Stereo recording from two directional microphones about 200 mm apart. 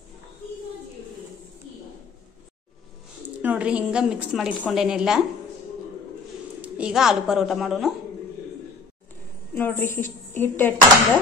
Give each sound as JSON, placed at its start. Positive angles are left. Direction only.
{"t": 3.4, "sound": "a woman's voice", "side_deg": -5}
{"t": 6.6, "sound": "a woman's voice", "side_deg": -5}
{"t": 9.6, "sound": "a woman's voice", "side_deg": 10}